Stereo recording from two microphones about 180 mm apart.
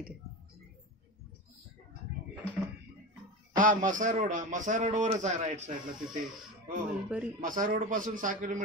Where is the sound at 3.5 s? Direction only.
45° right (ahead or behind).